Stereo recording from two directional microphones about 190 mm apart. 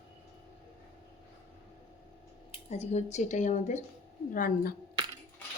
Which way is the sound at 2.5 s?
35° left (ahead or behind).